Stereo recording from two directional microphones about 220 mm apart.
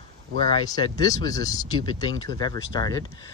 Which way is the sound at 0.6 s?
15° left (ahead or behind).